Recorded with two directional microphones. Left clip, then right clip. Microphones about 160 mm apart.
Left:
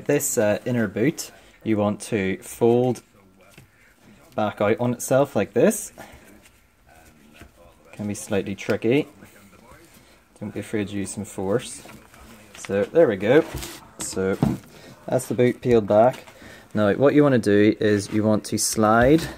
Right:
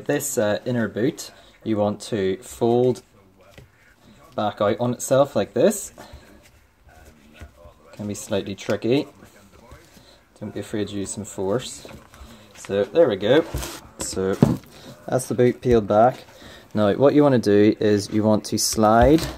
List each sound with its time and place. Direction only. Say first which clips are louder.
0.0 s speech: left 1 dB; 25° left (ahead or behind)
4.4 s speech: even; 25° left (ahead or behind)
8.1 s speech: even; 20° left (ahead or behind)
10.5 s speech: even; 25° left (ahead or behind)
13.9 s speech: right 2 dB; 10° left (ahead or behind)